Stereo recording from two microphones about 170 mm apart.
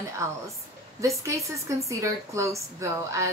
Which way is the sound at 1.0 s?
20° right (ahead or behind).